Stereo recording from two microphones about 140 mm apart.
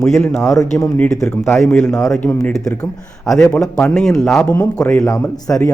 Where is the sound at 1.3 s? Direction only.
20° left (ahead or behind).